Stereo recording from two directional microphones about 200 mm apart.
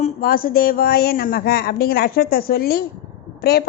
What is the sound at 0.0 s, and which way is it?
A woman's voice, 45° left (ahead or behind).